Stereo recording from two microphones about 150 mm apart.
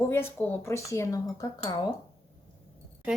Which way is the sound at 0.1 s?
15° left (ahead or behind).